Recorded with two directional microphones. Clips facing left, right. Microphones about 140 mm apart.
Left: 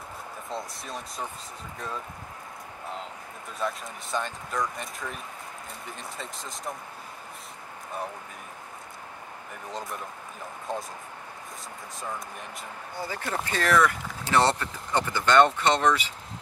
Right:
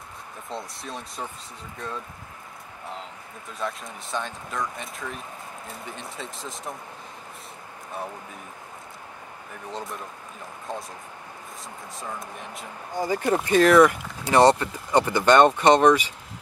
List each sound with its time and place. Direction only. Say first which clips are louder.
0.5 s speech: right 1 dB; centre (ahead or behind)
3.5 s speech: even; centre (ahead or behind)
9.7 s speech: right 1 dB; centre (ahead or behind)
12.9 s speech: right 9 dB; 15° right (ahead or behind)
14.9 s speech: right 6 dB; 55° right (ahead or behind)
15.7 s speech: right 7 dB; 15° right (ahead or behind)